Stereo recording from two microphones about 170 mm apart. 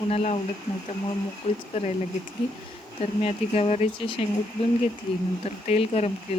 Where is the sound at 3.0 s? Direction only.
35° left (ahead or behind).